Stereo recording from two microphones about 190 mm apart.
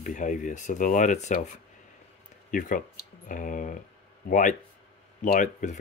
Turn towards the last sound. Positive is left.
turn(degrees=40)  # may be behind; listen again after turning